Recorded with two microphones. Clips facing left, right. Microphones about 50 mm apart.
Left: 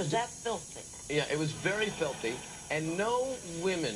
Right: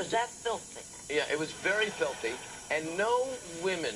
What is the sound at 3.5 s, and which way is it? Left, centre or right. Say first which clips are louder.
Speech: even; right.